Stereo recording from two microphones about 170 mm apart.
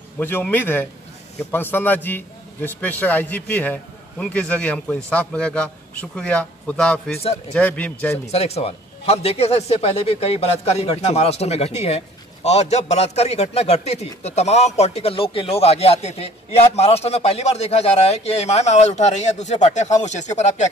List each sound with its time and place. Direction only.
0.2 s a man's voice: 10° left (ahead or behind)
8.3 s a man's voice: 40° left (ahead or behind)